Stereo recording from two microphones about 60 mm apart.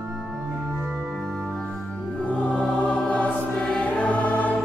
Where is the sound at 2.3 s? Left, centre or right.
Left.